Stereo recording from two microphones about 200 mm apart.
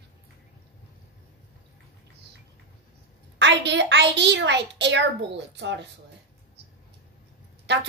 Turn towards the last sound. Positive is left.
turn(degrees=-60)  # may be behind; listen again after turning